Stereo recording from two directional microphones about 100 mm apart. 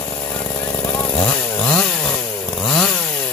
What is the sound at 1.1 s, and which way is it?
Chainsaw, 15° left (ahead or behind).